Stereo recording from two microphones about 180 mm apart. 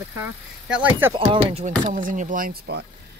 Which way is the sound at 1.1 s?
30° right (ahead or behind).